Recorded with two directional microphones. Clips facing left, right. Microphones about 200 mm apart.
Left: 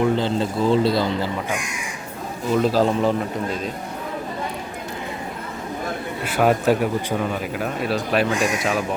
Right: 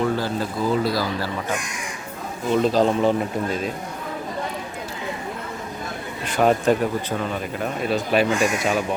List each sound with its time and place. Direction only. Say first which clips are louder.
0.0 s a man's voice: left 3 dB; 25° left (ahead or behind)
2.5 s speech: even; 5° left (ahead or behind)
6.2 s speech: even; 5° left (ahead or behind)